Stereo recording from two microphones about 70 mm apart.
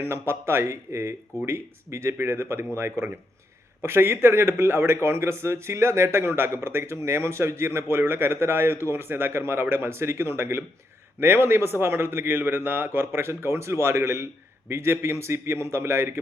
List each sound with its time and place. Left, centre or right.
0.0 s speech: right